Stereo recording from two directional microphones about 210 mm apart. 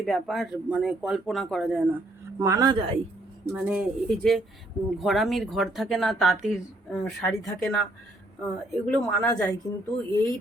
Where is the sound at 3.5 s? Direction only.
5° right (ahead or behind).